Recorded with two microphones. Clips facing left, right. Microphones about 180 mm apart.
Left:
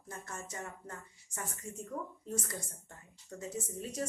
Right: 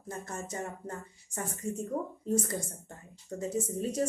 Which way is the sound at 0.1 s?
35° right (ahead or behind).